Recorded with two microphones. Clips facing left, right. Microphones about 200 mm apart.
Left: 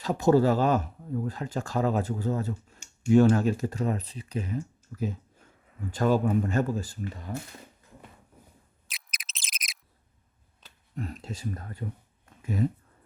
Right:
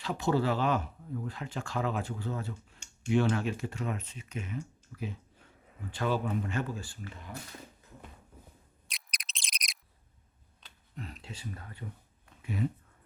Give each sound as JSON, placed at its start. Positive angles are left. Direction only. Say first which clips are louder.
{"t": 0.0, "sound": "speech", "louder": "left 8 dB", "side_deg": 40}
{"t": 8.9, "sound": "a sound", "louder": "left 1 dB", "side_deg": 0}
{"t": 10.9, "sound": "speech", "louder": "left 8 dB", "side_deg": 45}